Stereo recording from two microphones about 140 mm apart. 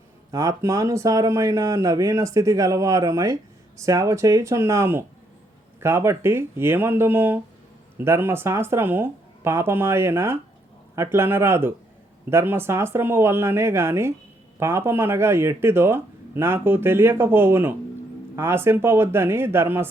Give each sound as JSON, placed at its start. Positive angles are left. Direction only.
{"t": 0.3, "sound": "speech", "side_deg": -25}